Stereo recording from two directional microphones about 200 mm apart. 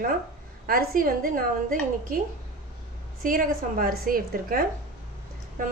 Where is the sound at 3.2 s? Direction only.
45° right (ahead or behind).